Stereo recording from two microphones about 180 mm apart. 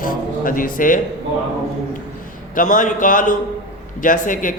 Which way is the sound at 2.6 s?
45° left (ahead or behind).